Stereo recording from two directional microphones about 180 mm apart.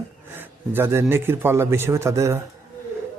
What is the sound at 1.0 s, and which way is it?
A man's voice, 10° right (ahead or behind).